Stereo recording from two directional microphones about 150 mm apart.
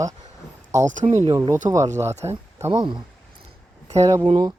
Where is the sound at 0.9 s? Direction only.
55° right (ahead or behind).